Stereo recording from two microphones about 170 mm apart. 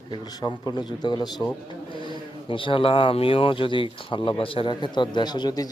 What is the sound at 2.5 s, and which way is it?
A man's voice, 30° left (ahead or behind).